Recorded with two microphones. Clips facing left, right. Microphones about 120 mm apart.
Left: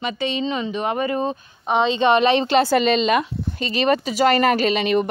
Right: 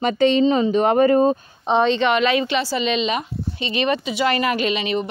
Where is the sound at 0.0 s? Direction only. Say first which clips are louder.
Right 8 dB; 45° right (ahead or behind).